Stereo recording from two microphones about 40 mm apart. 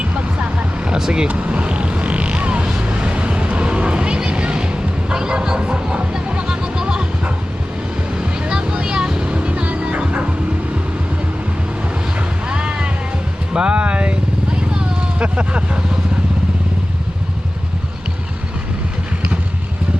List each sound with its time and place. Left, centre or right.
0.0 s vehicle: right
0.9 s speech: centre
1.3 s vehicle: right
8.4 s vehicle: right
9.2 s vehicle: right
9.6 s music: right
12.5 s music: right
13.5 s vehicle: right
15.2 s vehicle: right